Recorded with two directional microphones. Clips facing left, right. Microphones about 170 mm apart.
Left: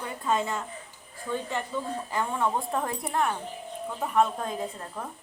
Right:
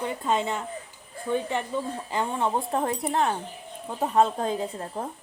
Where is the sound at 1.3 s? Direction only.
25° right (ahead or behind).